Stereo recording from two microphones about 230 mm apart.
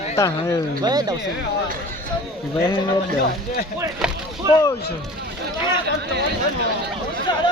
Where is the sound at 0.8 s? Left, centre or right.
Centre.